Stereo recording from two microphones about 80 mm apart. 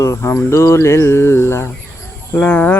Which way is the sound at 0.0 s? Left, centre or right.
Left.